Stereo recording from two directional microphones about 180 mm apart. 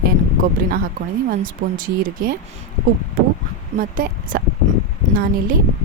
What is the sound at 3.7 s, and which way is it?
Speech, 50° right (ahead or behind).